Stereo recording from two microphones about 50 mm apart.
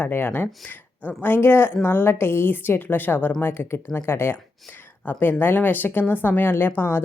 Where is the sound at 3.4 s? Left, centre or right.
Left.